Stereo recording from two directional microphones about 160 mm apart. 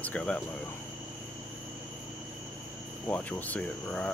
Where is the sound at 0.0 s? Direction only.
10° left (ahead or behind).